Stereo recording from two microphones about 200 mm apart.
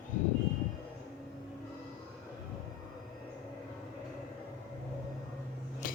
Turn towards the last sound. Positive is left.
turn(degrees=45)  # may be behind; listen again after turning